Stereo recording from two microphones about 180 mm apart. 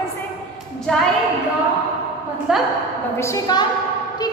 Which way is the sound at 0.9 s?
5° left (ahead or behind).